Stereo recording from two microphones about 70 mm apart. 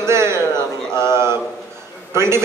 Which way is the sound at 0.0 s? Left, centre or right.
Right.